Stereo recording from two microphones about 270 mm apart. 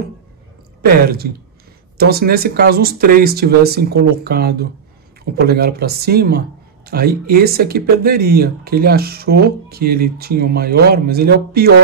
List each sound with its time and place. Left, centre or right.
0.8 s speech: right